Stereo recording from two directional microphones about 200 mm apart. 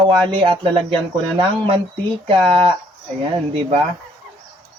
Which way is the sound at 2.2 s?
25° right (ahead or behind).